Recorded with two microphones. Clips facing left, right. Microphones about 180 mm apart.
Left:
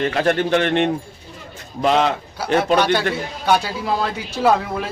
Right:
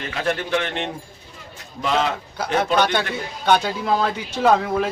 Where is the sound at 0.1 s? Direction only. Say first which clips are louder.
Left 5 dB; 50° left (ahead or behind).